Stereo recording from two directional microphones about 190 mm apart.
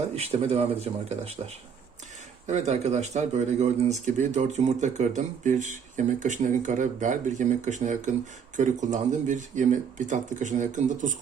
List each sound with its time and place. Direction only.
0.1 s speech: 30° right (ahead or behind)
2.5 s speech: 35° right (ahead or behind)